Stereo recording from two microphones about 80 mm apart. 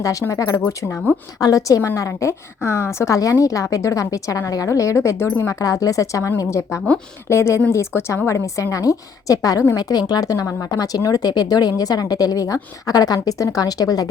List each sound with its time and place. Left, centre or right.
0.0 s a woman's voice: left
9.7 s speech: left